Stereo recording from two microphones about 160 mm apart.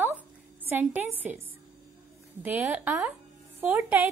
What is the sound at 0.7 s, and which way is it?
A woman's voice, 10° right (ahead or behind).